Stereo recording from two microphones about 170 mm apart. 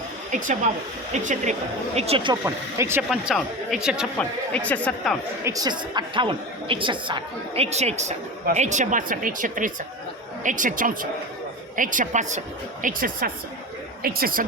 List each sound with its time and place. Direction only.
0.3 s speech: 50° right (ahead or behind)
2.0 s speech: 35° right (ahead or behind)
2.4 s speech: 15° right (ahead or behind)
3.1 s speech: centre (ahead or behind)
4.2 s speech: 10° left (ahead or behind)
5.4 s a woman's voice: 20° right (ahead or behind); by 14.4 s 60° right (ahead or behind)